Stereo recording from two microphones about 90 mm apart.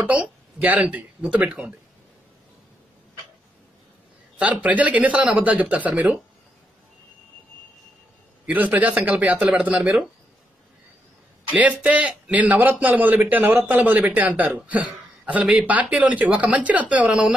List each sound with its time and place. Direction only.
0.0 s a man's voice: 15° right (ahead or behind)
4.4 s a man's voice: 15° right (ahead or behind)
8.5 s a man's voice: 20° right (ahead or behind)
11.8 s a man's voice: 15° right (ahead or behind)